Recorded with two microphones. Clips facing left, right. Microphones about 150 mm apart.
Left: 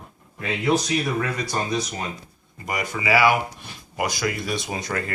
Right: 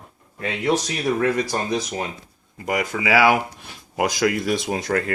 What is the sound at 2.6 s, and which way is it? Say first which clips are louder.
Speech: right 4 dB; 85° right.